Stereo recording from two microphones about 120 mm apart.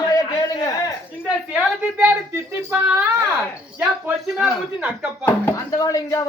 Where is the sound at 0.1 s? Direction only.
30° left (ahead or behind).